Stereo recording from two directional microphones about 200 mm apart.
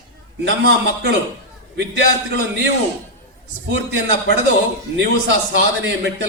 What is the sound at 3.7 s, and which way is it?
A man's voice, 70° right (ahead or behind).